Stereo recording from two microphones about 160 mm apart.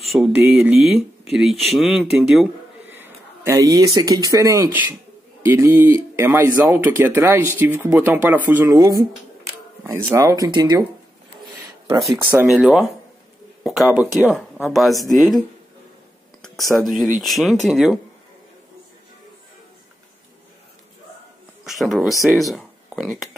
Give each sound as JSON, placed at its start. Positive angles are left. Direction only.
{"t": 0.0, "sound": "speech", "side_deg": 0}
{"t": 2.9, "sound": "a man's voice", "side_deg": -15}
{"t": 12.4, "sound": "speech", "side_deg": 0}
{"t": 14.1, "sound": "speech", "side_deg": 0}
{"t": 16.4, "sound": "speech", "side_deg": 0}
{"t": 21.6, "sound": "speech", "side_deg": 0}